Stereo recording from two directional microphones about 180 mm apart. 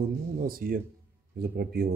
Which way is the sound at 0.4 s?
55° right (ahead or behind).